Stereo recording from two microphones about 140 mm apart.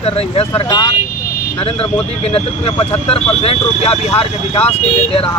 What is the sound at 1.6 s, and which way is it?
Speech, 45° left (ahead or behind).